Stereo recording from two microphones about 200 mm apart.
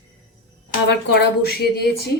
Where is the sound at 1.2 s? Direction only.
55° left (ahead or behind).